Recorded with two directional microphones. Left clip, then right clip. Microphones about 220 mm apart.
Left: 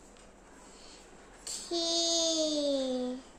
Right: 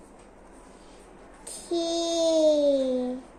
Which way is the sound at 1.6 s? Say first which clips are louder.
Right 3 dB; 15° left (ahead or behind).